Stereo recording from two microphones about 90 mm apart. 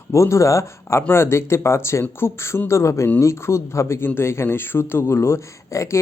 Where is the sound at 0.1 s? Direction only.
35° left (ahead or behind).